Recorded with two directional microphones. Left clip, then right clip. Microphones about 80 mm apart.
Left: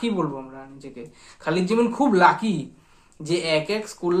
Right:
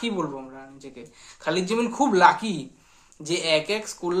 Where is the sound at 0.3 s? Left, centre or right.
Centre.